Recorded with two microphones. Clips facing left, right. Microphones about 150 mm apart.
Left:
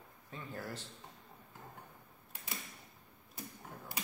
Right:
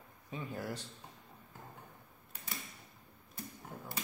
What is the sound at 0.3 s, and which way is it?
Speech, 15° right (ahead or behind).